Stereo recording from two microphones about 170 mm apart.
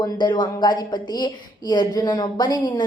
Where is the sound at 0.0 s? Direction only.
25° left (ahead or behind).